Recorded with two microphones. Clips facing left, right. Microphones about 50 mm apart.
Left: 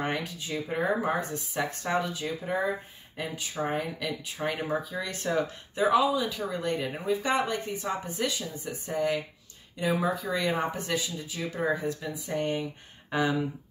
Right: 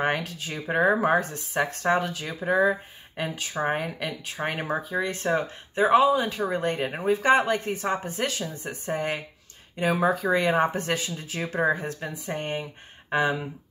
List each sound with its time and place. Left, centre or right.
0.0 s speech: right
2.2 s speech: right
3.2 s speech: right